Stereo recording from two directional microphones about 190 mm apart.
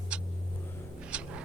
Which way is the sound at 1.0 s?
5° right (ahead or behind).